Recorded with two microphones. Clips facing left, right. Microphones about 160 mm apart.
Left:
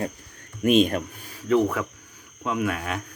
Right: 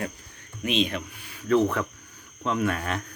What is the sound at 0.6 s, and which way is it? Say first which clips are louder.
Speech: left 7 dB; 50° left (ahead or behind).